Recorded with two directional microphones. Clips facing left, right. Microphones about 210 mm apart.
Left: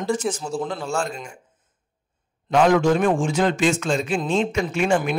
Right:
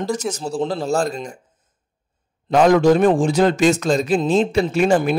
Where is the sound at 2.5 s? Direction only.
40° right (ahead or behind).